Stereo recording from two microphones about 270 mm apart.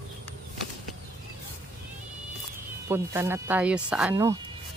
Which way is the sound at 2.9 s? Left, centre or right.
Centre.